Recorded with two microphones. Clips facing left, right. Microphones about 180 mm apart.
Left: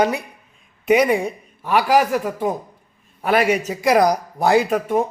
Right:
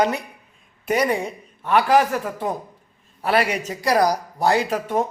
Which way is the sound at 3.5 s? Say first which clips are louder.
Left 5 dB; 10° left (ahead or behind).